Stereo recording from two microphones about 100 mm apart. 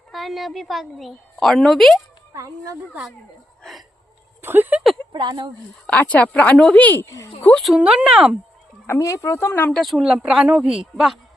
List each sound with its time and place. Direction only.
0.1 s a woman's voice: centre (ahead or behind)
2.3 s speech: 30° right (ahead or behind)
3.6 s a sound: centre (ahead or behind)
4.4 s a sound: 20° right (ahead or behind)
5.1 s speech: 45° right (ahead or behind)
5.8 s speech: 15° left (ahead or behind)
7.8 s speech: 10° right (ahead or behind)
8.9 s speech: 30° left (ahead or behind)
9.7 s a woman's voice: centre (ahead or behind)